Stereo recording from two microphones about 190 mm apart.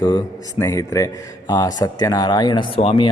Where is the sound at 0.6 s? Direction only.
15° left (ahead or behind).